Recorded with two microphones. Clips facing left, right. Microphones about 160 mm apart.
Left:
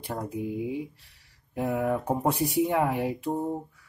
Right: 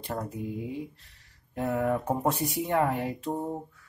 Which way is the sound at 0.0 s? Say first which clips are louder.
Left 2 dB; 10° left (ahead or behind).